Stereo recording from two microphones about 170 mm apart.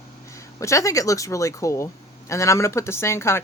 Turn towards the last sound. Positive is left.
turn(degrees=15)  # may be behind; listen again after turning